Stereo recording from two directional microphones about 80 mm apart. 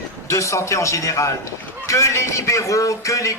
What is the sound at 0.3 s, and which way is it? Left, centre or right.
Speech, left.